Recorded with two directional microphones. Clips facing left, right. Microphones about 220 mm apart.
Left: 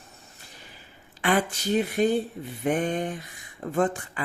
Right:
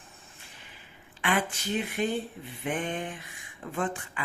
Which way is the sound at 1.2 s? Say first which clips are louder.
Left 5 dB; 40° left (ahead or behind).